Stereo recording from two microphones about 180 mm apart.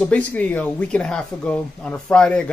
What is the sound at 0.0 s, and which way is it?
Speech, 5° left (ahead or behind).